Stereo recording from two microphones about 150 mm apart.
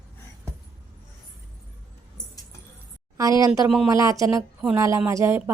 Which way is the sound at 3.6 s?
5° right (ahead or behind).